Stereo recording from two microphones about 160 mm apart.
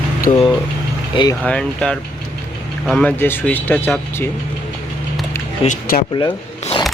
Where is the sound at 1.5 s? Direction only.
5° left (ahead or behind).